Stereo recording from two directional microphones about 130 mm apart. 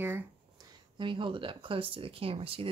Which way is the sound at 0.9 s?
40° right (ahead or behind).